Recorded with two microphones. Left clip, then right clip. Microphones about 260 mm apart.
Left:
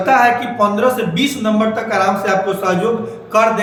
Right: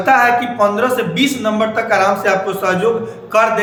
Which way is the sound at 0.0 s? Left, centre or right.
Centre.